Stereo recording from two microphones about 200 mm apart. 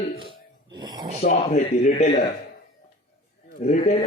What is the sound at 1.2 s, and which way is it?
Speech, 35° left (ahead or behind).